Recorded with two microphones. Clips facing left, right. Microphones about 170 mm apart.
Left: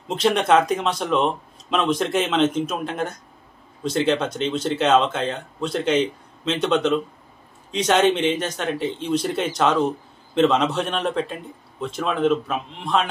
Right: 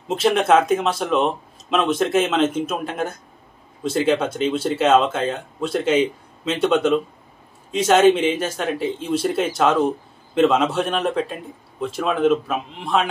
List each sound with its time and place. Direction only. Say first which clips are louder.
0.1 s speech: right 2 dB; 5° right (ahead or behind)